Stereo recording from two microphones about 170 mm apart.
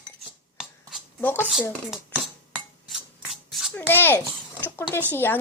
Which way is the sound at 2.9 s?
Centre (ahead or behind).